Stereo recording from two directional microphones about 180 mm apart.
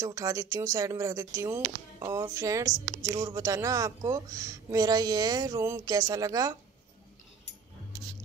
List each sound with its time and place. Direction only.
0.0 s speech: 15° right (ahead or behind)